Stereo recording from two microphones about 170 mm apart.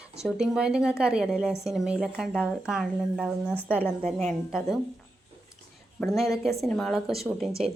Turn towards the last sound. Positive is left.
turn(degrees=0)  # may be behind; listen again after turning